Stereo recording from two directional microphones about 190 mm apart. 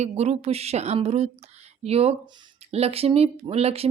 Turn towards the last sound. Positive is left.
turn(degrees=-30)  # may be behind; listen again after turning